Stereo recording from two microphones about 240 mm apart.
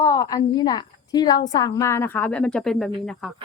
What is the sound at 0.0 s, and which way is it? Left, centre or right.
A woman's voice, centre.